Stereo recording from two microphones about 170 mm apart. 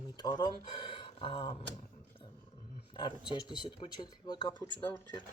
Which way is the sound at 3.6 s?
25° left (ahead or behind).